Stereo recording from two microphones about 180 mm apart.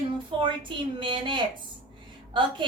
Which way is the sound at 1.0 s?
25° right (ahead or behind).